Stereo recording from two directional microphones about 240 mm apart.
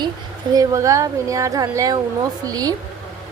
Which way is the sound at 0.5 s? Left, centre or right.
Centre.